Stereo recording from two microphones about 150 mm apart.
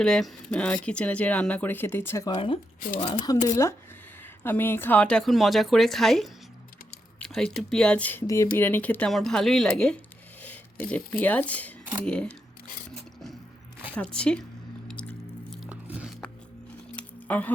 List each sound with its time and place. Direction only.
0.0 s speech: 5° left (ahead or behind)
2.2 s speech: 35° left (ahead or behind)
3.4 s a woman's voice: 20° left (ahead or behind)
13.9 s speech: 5° left (ahead or behind)
14.8 s biting: 5° left (ahead or behind)
15.7 s music: 10° right (ahead or behind)
16.9 s a sound: 10° left (ahead or behind)